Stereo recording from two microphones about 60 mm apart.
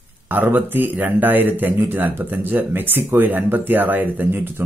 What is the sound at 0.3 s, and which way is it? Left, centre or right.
Speech, right.